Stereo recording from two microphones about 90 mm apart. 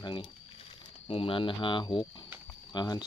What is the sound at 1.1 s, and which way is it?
Speech, 85° left.